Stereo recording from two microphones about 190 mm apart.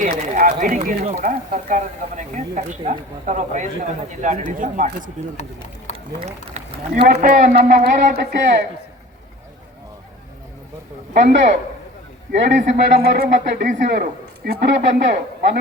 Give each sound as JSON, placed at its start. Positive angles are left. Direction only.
{"t": 0.0, "sound": "speech", "side_deg": -45}
{"t": 6.2, "sound": "speech", "side_deg": -35}
{"t": 8.1, "sound": "speech", "side_deg": -55}
{"t": 11.1, "sound": "speech", "side_deg": -40}
{"t": 12.5, "sound": "speech", "side_deg": -55}